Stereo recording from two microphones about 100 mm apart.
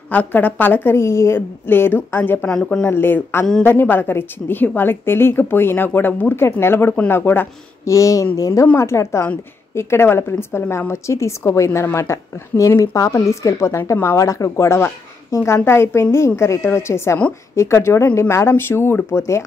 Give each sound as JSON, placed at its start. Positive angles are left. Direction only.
{"t": 0.1, "sound": "a woman's voice", "side_deg": 15}
{"t": 2.5, "sound": "a woman's voice", "side_deg": 10}
{"t": 2.9, "sound": "a woman's voice", "side_deg": 20}
{"t": 7.9, "sound": "a woman's voice", "side_deg": 35}